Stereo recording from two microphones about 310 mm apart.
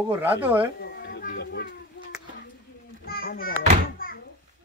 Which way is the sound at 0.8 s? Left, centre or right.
Left.